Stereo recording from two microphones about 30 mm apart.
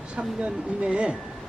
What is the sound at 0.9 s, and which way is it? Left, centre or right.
Speech, right.